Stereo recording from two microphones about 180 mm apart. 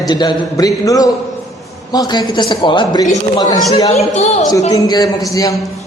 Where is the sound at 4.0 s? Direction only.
40° left (ahead or behind).